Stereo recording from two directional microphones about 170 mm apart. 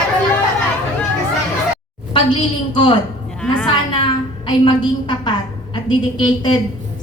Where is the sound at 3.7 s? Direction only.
25° left (ahead or behind).